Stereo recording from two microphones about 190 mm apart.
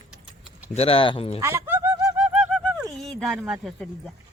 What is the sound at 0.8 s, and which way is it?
Speech, 30° left (ahead or behind).